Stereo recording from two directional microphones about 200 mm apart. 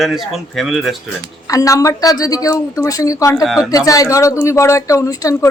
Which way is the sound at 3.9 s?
15° left (ahead or behind).